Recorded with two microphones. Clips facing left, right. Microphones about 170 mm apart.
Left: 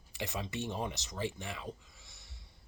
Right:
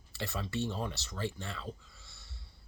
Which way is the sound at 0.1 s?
15° left (ahead or behind).